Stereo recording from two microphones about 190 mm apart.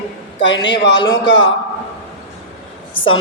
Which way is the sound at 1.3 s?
80° left.